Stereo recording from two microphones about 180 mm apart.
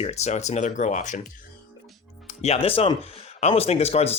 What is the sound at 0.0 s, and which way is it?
Speech, 40° left (ahead or behind).